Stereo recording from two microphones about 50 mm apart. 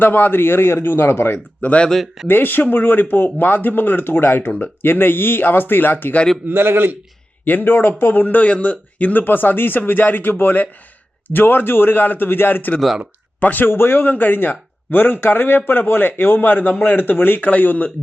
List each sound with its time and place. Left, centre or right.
0.0 s speech: left
1.6 s speech: left
2.2 s speech: left
6.5 s a man's voice: right
7.4 s speech: left
13.7 s speech: left